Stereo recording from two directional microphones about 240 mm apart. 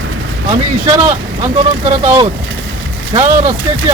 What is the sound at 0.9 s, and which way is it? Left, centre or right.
Speech, centre.